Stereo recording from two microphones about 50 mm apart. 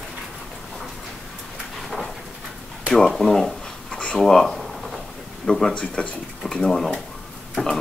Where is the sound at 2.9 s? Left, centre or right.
Centre.